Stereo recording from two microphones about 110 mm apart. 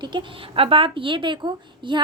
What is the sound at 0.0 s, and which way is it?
A woman's voice, 45° right (ahead or behind).